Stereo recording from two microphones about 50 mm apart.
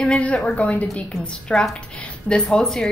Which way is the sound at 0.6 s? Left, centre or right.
Left.